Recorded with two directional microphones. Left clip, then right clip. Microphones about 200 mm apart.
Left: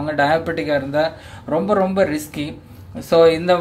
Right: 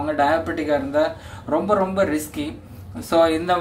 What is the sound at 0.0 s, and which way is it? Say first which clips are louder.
Speech: left 2 dB; 40° left (ahead or behind).